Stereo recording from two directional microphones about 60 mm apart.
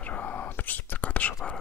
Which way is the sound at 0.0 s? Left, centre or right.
Left.